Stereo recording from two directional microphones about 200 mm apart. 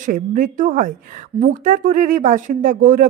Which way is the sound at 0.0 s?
40° right (ahead or behind).